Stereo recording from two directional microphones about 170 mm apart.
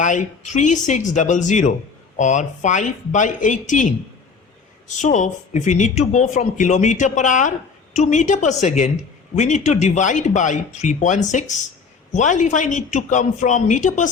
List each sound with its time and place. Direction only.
0.0 s speech: 45° left (ahead or behind)
4.9 s speech: 45° left (ahead or behind)